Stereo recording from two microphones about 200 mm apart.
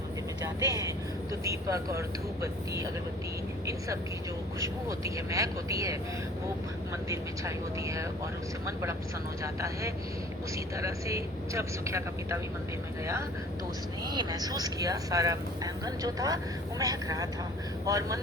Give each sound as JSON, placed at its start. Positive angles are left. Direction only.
{"t": 0.4, "sound": "vehicle", "side_deg": -15}
{"t": 1.5, "sound": "speech", "side_deg": -15}
{"t": 4.6, "sound": "speech", "side_deg": -15}
{"t": 7.1, "sound": "speech", "side_deg": -15}
{"t": 14.1, "sound": "speech", "side_deg": -20}